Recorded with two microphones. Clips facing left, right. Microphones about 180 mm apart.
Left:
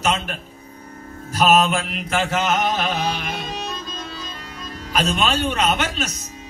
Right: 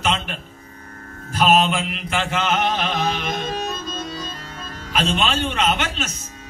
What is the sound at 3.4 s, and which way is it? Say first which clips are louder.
Music: right 3 dB; 40° right (ahead or behind).